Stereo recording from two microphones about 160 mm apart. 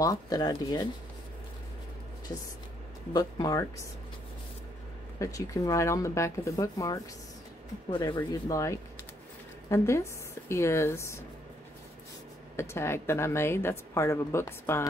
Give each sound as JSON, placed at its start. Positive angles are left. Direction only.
{"t": 0.0, "sound": "speech", "side_deg": 20}
{"t": 3.1, "sound": "speech", "side_deg": 25}
{"t": 5.2, "sound": "a woman's voice", "side_deg": 20}
{"t": 12.5, "sound": "a woman's voice", "side_deg": 15}